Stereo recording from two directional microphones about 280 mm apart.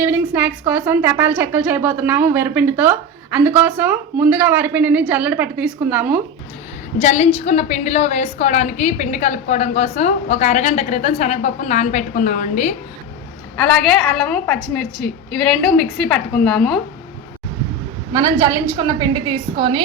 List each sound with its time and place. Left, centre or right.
0.0 s a woman's voice: centre
7.0 s a woman's voice: left
13.6 s a woman's voice: centre
15.8 s a woman's voice: centre
18.1 s a woman's voice: centre